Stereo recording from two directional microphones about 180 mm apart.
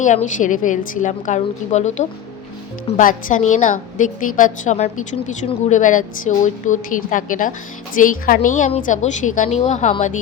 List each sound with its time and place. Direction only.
0.0 s a woman's voice: 40° left (ahead or behind)